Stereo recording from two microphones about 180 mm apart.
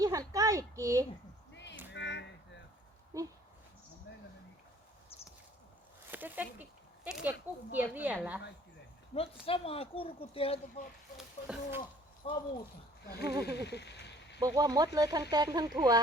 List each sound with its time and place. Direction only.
0.0 s a sound: 20° right (ahead or behind)
1.9 s a sound: 80° left
3.1 s speech: 20° right (ahead or behind)
6.1 s speech: 10° right (ahead or behind)
9.1 s speech: 30° left (ahead or behind)
11.2 s speech: 5° right (ahead or behind)
12.2 s speech: 35° left (ahead or behind)
13.1 s speech: 60° left (ahead or behind)
14.3 s speech: 20° right (ahead or behind)